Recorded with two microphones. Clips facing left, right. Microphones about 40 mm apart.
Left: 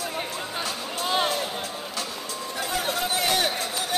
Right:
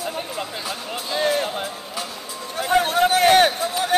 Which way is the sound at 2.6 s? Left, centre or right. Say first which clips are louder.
Right 10 dB; right.